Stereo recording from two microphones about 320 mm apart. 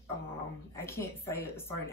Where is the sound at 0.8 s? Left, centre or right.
Centre.